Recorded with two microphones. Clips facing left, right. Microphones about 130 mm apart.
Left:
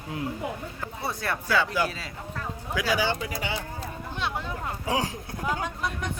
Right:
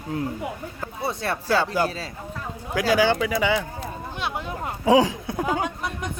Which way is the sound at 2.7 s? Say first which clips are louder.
Right 7 dB; 50° right (ahead or behind).